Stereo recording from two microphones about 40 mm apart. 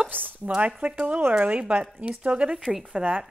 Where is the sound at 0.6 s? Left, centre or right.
Right.